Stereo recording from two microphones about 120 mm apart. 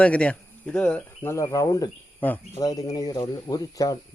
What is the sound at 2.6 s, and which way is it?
Speech, 30° left (ahead or behind).